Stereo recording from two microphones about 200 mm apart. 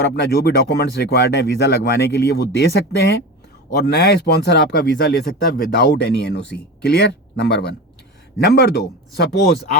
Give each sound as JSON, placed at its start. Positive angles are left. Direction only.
{"t": 0.0, "sound": "speech", "side_deg": 55}